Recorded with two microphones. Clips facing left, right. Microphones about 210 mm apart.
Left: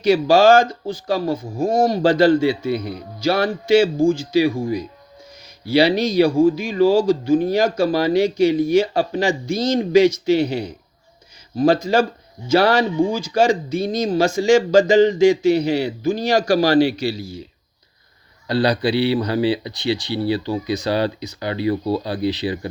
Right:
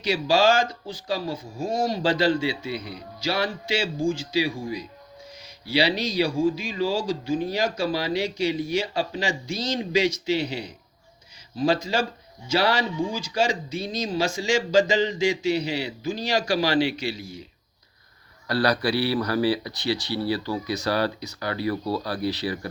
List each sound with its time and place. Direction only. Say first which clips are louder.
0.0 s speech: left 7 dB; 50° left (ahead or behind); by 17.4 s 35° left (ahead or behind)
18.4 s speech: left 4 dB; 25° left (ahead or behind)